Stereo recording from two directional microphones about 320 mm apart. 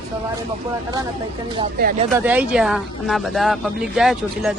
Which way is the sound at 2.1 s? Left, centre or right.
Centre.